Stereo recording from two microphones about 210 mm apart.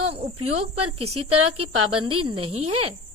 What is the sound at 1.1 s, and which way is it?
Speech, 90° right.